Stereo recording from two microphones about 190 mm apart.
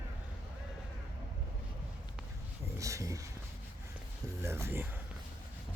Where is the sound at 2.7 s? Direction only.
15° right (ahead or behind).